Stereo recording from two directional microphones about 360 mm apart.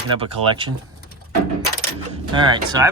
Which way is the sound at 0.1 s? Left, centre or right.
Centre.